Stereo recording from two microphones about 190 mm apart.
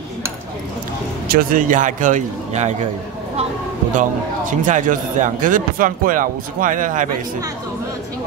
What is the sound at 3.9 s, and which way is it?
Speech, 40° right (ahead or behind).